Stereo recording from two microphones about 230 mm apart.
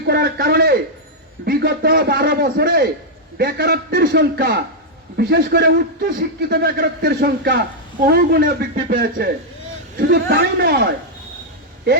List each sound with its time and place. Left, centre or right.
0.0 s a man's voice: right